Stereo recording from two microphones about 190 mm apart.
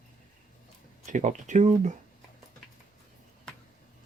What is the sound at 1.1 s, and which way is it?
Speech, 40° right (ahead or behind).